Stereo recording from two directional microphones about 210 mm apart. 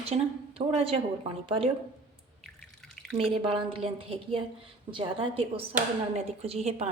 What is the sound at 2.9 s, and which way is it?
Drip, centre (ahead or behind).